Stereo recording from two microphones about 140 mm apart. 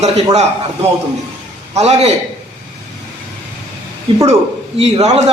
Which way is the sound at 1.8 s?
50° right (ahead or behind).